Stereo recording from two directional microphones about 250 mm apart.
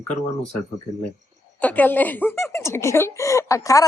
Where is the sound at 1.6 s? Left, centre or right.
Centre.